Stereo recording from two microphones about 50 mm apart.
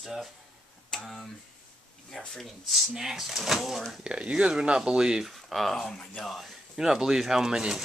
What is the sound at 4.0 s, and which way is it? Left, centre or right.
Speech, centre.